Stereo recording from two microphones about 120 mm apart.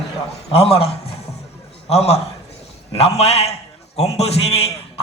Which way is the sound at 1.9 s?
60° left (ahead or behind).